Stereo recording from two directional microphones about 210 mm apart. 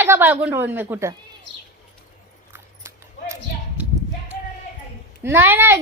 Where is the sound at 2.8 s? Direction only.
15° right (ahead or behind).